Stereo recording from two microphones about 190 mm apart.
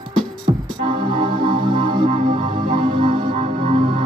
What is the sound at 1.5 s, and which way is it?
Music, 25° right (ahead or behind).